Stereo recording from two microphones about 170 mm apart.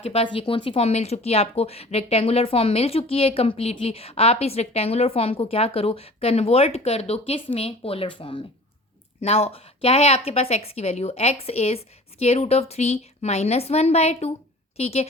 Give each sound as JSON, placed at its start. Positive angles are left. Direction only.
{"t": 0.0, "sound": "a woman's voice", "side_deg": 35}